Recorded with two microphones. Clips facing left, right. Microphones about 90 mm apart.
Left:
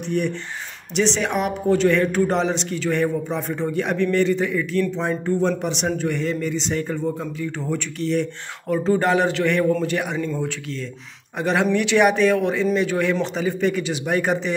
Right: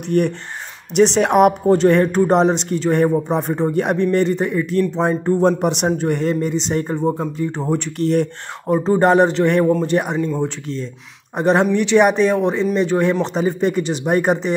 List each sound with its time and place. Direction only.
0.1 s a man's voice: 60° right (ahead or behind)
1.7 s a man's voice: 45° right (ahead or behind)
5.6 s speech: 55° right (ahead or behind)
5.9 s a man's voice: 45° right (ahead or behind)
8.0 s a man's voice: 55° right (ahead or behind)
8.6 s a man's voice: 30° right (ahead or behind)
10.1 s speech: 20° right (ahead or behind)
11.3 s a man's voice: 35° right (ahead or behind)